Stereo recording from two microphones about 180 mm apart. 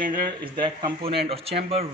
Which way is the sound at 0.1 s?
25° right (ahead or behind).